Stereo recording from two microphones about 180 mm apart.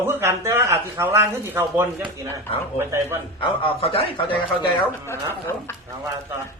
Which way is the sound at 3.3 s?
30° left (ahead or behind).